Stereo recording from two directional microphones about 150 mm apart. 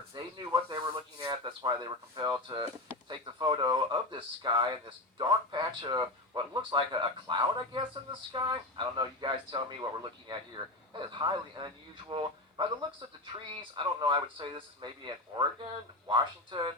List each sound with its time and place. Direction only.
0.1 s speech: 30° right (ahead or behind)